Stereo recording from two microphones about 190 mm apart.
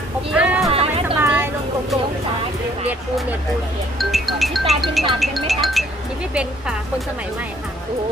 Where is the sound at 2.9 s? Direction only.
10° right (ahead or behind).